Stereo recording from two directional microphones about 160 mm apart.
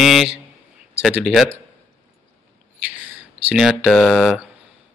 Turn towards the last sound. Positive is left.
turn(degrees=0)  # may be behind; listen again after turning